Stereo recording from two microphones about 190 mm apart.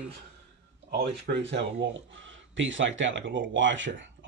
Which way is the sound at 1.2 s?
65° right (ahead or behind).